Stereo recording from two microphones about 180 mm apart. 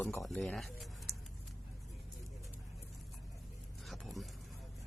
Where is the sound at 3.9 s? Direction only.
Centre (ahead or behind).